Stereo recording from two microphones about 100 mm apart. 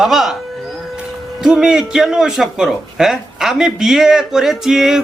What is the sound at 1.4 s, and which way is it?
A man's voice, 5° right (ahead or behind).